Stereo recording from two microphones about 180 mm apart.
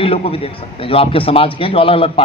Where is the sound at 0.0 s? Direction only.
30° left (ahead or behind).